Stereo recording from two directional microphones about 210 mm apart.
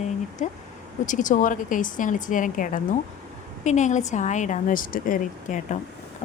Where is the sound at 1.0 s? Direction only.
35° left (ahead or behind).